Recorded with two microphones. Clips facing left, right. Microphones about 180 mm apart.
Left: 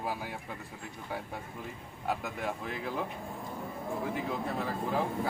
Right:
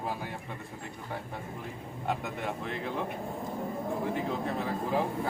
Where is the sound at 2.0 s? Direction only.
Centre (ahead or behind).